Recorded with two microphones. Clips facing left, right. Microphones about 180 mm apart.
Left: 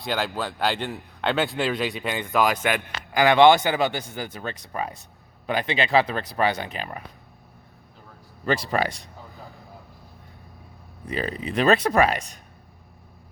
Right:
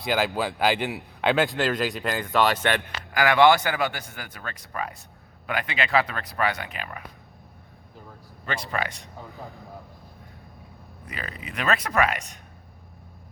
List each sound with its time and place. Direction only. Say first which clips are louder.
0.0 s a man's voice: right 2 dB; 5° right (ahead or behind)
3.1 s speech: left 3 dB; 20° left (ahead or behind)
8.4 s speech: left 6 dB; 35° left (ahead or behind)
11.0 s speech: left 9 dB; 30° left (ahead or behind)